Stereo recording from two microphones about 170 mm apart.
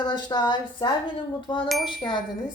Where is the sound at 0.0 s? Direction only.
25° left (ahead or behind).